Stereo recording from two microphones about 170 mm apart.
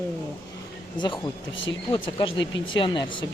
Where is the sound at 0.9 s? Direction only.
25° left (ahead or behind).